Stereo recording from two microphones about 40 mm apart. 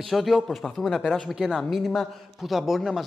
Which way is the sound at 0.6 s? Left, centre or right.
Centre.